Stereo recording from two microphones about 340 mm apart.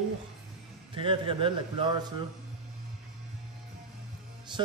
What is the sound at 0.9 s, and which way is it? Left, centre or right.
A man's voice, centre.